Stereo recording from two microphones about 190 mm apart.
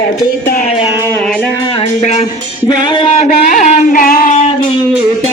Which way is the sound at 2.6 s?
25° left (ahead or behind).